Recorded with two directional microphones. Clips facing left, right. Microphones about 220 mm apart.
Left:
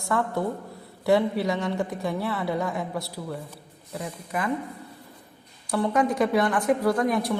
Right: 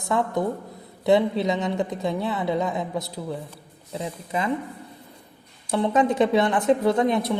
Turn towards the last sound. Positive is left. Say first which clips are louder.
# right 3 dB
turn(degrees=-25)  # may be behind; listen again after turning